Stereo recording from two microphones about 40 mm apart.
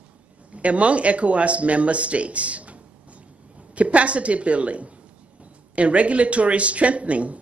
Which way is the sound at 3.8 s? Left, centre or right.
Right.